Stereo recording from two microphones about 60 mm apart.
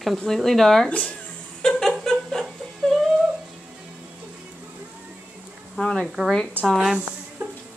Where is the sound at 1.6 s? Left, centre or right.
Centre.